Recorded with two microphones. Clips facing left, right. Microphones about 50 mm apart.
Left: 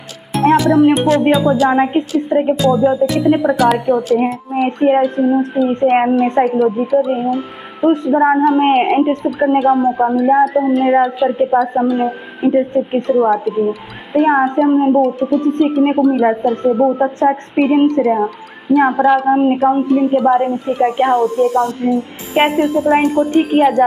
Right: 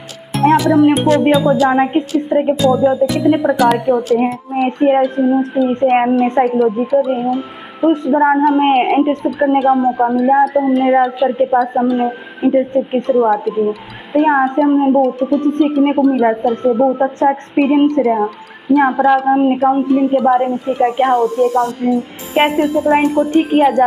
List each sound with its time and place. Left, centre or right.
0.4 s speech: centre
9.7 s a woman's voice: right
9.9 s speech: centre